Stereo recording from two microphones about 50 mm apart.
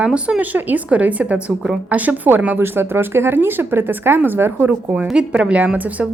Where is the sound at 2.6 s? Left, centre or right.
Right.